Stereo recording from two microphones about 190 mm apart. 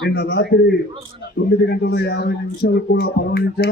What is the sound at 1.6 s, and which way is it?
Speech, 60° left (ahead or behind).